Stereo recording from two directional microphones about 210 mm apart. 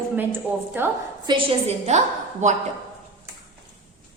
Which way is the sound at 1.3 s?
25° right (ahead or behind).